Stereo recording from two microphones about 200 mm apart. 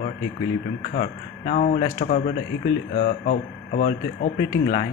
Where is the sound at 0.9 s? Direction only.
45° left (ahead or behind).